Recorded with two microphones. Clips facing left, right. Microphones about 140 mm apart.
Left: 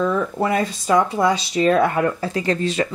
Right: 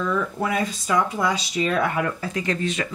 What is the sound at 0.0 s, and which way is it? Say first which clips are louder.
A woman's voice: left 4 dB; 35° left (ahead or behind).